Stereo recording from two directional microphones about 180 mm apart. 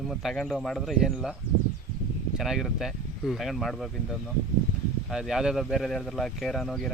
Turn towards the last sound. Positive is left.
turn(degrees=0)  # may be behind; listen again after turning